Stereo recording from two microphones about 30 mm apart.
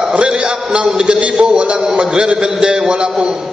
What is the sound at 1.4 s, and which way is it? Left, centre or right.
A man's voice, right.